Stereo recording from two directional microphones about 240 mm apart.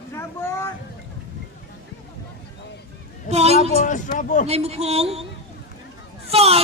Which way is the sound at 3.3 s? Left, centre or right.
Right.